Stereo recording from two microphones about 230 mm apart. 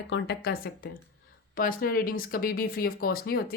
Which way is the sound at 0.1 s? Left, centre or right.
Left.